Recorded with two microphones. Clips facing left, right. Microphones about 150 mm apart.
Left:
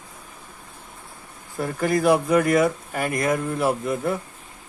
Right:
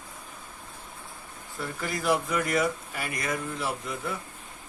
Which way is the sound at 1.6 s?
50° left (ahead or behind).